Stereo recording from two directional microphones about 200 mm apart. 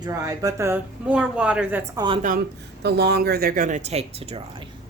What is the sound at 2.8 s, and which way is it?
Speech, 55° right (ahead or behind).